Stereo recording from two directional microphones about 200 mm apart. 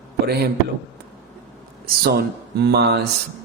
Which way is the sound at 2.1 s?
55° right (ahead or behind).